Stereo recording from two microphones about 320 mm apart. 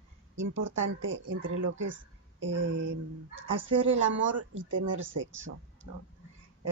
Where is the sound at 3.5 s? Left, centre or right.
Right.